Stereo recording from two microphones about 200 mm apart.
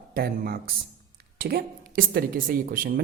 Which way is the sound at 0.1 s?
50° right (ahead or behind).